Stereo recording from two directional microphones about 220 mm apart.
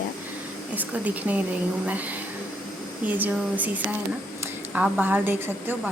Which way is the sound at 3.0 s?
5° right (ahead or behind).